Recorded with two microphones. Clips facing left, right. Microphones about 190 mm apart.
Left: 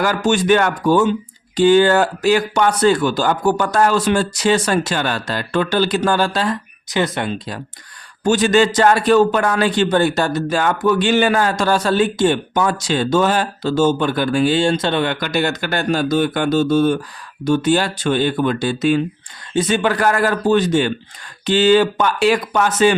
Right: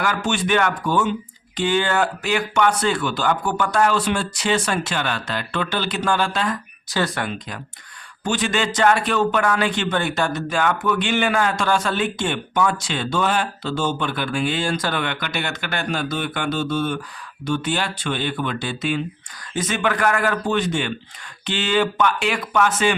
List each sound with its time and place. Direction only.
0.0 s a man's voice: 40° left (ahead or behind)
6.9 s a man's voice: 20° left (ahead or behind); by 19.0 s 40° left (ahead or behind)
19.5 s a man's voice: 30° left (ahead or behind)